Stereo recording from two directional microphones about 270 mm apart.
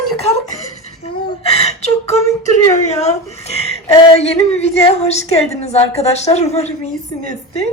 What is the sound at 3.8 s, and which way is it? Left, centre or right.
A woman's voice, centre.